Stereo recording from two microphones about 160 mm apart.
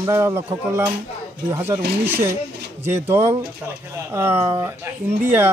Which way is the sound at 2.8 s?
15° right (ahead or behind).